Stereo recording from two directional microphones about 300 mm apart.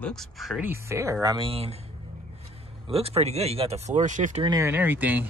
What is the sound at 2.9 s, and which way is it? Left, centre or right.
Speech, centre.